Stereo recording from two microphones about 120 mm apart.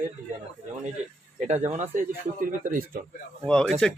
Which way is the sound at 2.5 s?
90° right.